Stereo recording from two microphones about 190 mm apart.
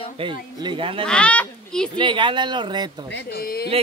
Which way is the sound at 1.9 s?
25° right (ahead or behind).